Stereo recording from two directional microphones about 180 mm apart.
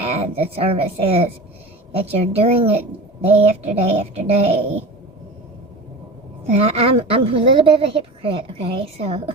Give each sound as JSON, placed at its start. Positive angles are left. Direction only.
{"t": 0.0, "sound": "a woman's voice", "side_deg": -35}
{"t": 6.4, "sound": "a woman's voice", "side_deg": -35}